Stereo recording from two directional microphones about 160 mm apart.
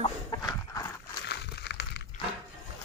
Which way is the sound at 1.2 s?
90° left.